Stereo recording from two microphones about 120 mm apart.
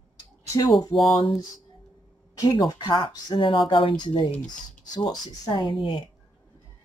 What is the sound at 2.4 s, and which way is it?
Speech, 35° left (ahead or behind).